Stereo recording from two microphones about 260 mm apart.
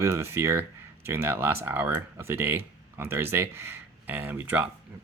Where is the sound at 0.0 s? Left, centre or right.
Centre.